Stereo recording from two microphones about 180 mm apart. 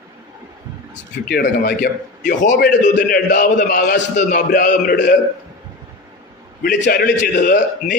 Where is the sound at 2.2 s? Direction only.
45° left (ahead or behind).